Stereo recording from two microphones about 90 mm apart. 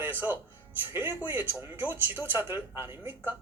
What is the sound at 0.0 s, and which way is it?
Speech, 25° right (ahead or behind).